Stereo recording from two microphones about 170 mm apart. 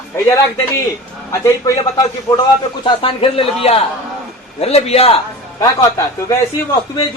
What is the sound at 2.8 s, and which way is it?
A man's voice, 35° left (ahead or behind).